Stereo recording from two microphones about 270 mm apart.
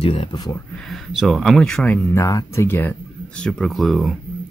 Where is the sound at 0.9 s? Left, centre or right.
Centre.